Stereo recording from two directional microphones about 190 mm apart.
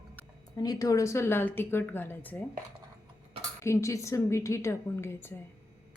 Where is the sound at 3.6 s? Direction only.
15° left (ahead or behind).